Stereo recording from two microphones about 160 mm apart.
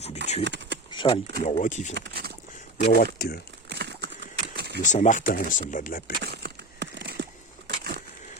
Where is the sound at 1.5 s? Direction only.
50° left (ahead or behind).